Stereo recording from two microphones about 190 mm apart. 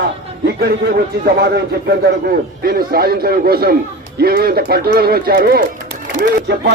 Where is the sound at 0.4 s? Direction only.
55° right (ahead or behind).